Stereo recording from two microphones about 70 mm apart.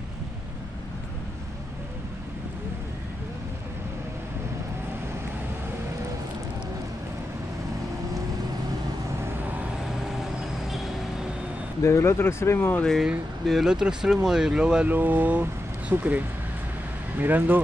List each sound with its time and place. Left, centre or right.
9.4 s vehicle: right
9.8 s vehicle: centre
11.8 s speech: left
12.5 s speech: left
13.5 s speech: centre
14.9 s speech: right